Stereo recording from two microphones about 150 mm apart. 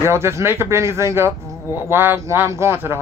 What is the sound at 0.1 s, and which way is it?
A man's voice, 15° right (ahead or behind).